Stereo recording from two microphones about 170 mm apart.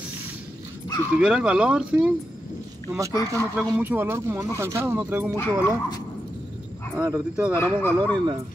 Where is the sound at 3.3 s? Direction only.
20° right (ahead or behind).